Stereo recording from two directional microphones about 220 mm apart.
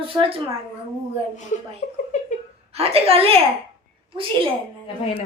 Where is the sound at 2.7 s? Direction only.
25° right (ahead or behind).